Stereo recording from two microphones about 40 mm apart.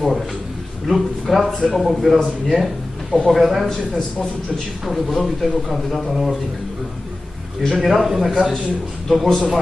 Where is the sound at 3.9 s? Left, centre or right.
Centre.